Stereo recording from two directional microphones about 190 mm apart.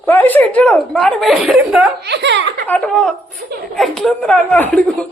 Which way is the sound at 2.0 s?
65° right (ahead or behind).